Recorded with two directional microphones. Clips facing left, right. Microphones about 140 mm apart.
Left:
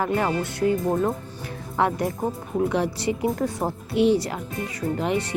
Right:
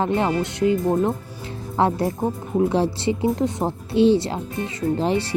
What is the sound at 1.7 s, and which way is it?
Speech, 30° right (ahead or behind).